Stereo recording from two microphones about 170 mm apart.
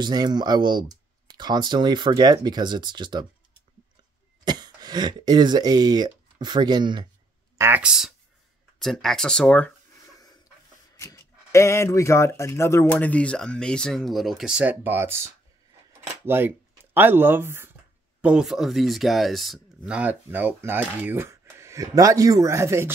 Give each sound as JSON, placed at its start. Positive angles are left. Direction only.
{"t": 0.0, "sound": "speech", "side_deg": -25}
{"t": 4.5, "sound": "speech", "side_deg": -25}
{"t": 7.5, "sound": "speech", "side_deg": -15}
{"t": 11.0, "sound": "speech", "side_deg": 15}